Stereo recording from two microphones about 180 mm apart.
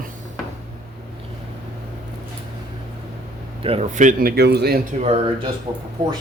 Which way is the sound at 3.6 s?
35° right (ahead or behind).